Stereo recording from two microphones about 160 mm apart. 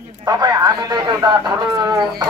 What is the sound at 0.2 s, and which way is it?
A man's voice, 25° right (ahead or behind).